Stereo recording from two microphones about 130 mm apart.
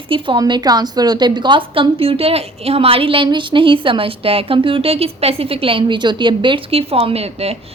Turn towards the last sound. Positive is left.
turn(degrees=-50)  # may be behind; listen again after turning